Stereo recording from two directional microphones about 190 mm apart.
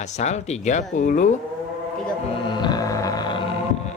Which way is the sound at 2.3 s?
25° left (ahead or behind).